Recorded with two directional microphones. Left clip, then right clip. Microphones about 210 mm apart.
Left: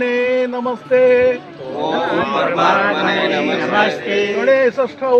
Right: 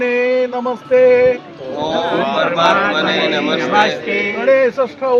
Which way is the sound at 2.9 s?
50° right (ahead or behind).